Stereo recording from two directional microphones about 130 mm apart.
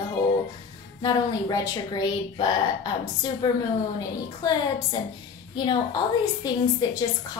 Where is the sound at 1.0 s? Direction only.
30° left (ahead or behind).